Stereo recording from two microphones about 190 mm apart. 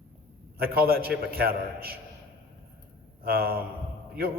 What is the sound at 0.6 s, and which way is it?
A man's voice, 55° right (ahead or behind).